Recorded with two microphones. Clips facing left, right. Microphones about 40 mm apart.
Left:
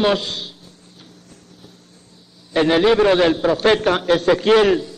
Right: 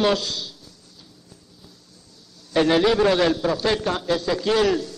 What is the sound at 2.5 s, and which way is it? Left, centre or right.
A man's voice, left.